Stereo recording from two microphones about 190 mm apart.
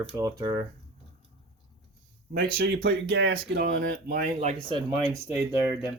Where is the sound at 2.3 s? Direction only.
65° right (ahead or behind); by 4.5 s 45° right (ahead or behind).